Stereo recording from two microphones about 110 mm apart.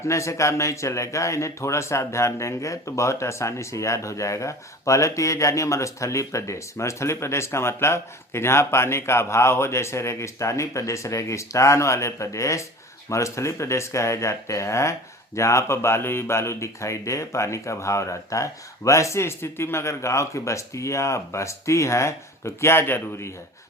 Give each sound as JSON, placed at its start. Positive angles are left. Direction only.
{"t": 0.0, "sound": "speech", "side_deg": 25}